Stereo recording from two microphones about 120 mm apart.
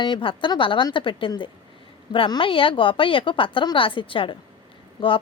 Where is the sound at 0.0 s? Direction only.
45° left (ahead or behind).